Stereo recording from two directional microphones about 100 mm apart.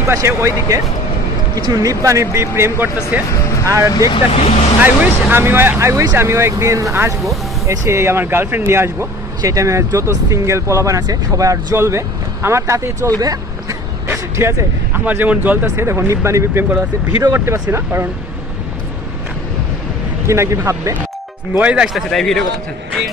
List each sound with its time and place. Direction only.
0.0 s speech: 30° right (ahead or behind)
4.1 s speech: 85° left
4.8 s speech: 20° right (ahead or behind); by 13.7 s 40° right (ahead or behind)
14.0 s speech: 25° right (ahead or behind)
15.0 s speech: 15° right (ahead or behind)
20.2 s speech: 30° right (ahead or behind)
21.5 s speech: 10° right (ahead or behind)
22.1 s speech: 5° left (ahead or behind)